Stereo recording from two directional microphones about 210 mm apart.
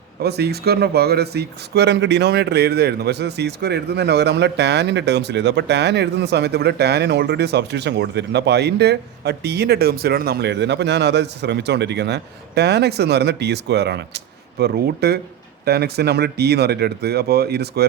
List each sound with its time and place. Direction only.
0.2 s speech: 50° right (ahead or behind)